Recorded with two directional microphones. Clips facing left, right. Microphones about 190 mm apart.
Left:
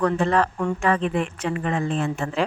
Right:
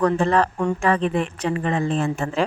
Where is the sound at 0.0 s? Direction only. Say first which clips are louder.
Right 2 dB; 35° right (ahead or behind).